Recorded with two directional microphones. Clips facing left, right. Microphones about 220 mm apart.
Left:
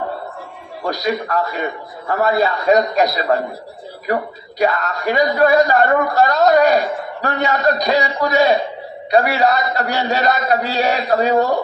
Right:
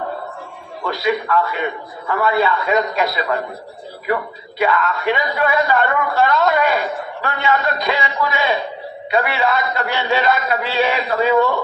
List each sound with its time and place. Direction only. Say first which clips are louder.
0.9 s a man's voice: right 1 dB; 40° left (ahead or behind)